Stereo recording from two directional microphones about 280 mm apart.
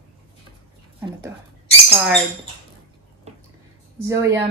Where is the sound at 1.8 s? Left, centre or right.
Centre.